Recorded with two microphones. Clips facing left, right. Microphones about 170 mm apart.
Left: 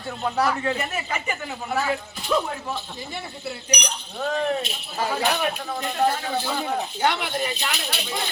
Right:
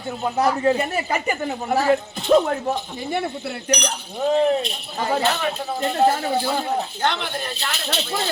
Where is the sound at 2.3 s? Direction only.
50° right (ahead or behind).